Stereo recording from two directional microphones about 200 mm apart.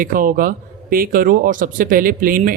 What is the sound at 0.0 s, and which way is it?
Speech, 45° right (ahead or behind).